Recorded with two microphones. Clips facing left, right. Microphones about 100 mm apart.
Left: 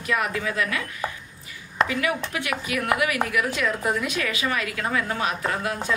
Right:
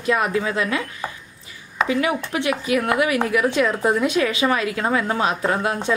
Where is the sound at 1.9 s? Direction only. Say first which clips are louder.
Right 5 dB; 25° right (ahead or behind).